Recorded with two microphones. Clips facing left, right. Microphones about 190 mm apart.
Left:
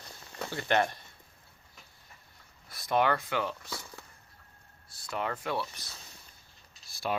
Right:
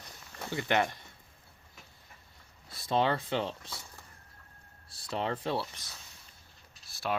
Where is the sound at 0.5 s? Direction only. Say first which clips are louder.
Left 1 dB; 15° right (ahead or behind).